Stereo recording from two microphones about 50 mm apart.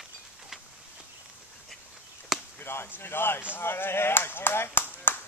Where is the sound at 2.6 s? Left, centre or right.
Left.